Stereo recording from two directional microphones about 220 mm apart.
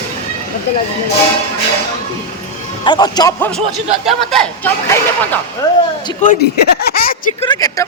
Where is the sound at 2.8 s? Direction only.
20° left (ahead or behind); by 4.7 s centre (ahead or behind).